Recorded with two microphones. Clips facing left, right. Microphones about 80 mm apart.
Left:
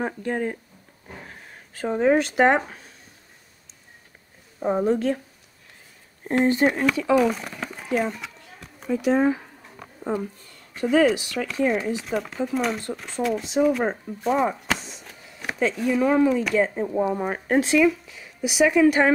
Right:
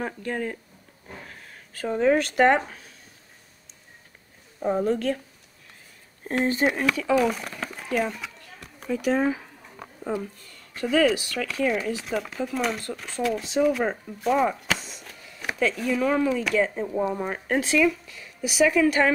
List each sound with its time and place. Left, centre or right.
0.0 s speech: centre
1.0 s a sound: centre
2.1 s speech: centre
4.6 s a woman's voice: centre
4.8 s speech: centre
6.6 s speech: centre
7.2 s a sound: centre
10.1 s speech: centre
14.2 s chop: centre
15.7 s speech: centre
16.5 s speech: left